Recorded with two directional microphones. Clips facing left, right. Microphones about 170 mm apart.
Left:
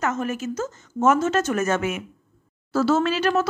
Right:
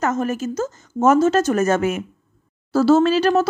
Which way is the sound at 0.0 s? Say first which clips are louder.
Right 4 dB; 40° right (ahead or behind).